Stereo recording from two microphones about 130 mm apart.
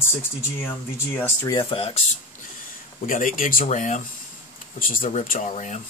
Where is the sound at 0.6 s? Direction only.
15° left (ahead or behind).